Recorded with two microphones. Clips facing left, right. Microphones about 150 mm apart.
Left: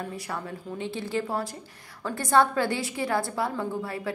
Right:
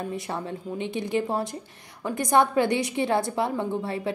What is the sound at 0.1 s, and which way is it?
A woman's voice, 25° right (ahead or behind).